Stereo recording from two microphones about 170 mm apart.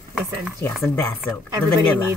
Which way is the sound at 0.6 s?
15° left (ahead or behind).